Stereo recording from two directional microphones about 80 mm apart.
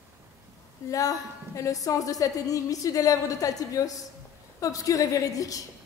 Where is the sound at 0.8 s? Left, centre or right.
Left.